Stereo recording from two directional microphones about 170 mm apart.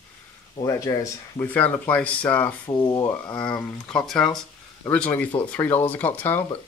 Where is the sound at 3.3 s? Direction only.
5° left (ahead or behind).